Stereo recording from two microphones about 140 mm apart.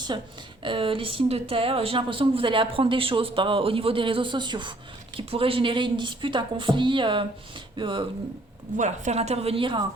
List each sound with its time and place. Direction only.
0.6 s speech: 40° right (ahead or behind)
8.7 s a woman's voice: 60° right (ahead or behind); by 9.8 s 40° right (ahead or behind)